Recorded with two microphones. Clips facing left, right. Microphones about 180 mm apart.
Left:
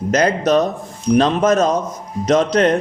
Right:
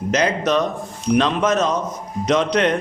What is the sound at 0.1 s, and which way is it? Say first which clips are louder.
A man's voice: left 4 dB; 45° left (ahead or behind).